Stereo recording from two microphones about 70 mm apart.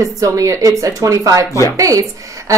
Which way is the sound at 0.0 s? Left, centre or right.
Right.